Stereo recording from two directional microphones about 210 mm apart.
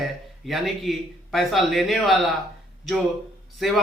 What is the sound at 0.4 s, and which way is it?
Speech, centre (ahead or behind).